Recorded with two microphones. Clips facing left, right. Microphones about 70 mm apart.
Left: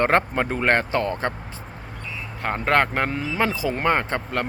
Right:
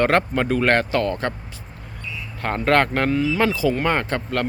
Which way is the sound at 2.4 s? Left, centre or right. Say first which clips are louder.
Right 2 dB; centre.